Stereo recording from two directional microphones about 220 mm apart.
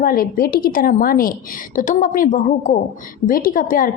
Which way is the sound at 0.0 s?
40° left (ahead or behind).